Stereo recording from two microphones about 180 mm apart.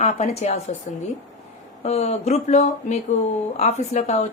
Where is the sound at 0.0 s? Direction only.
40° left (ahead or behind).